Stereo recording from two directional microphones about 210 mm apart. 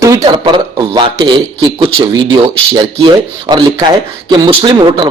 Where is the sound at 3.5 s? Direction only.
20° right (ahead or behind).